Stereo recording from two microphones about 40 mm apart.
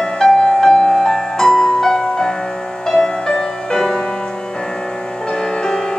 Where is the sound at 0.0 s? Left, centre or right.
Centre.